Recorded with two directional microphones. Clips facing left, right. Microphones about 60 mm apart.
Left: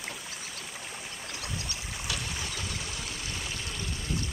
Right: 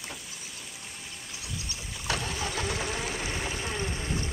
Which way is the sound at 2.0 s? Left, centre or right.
Right.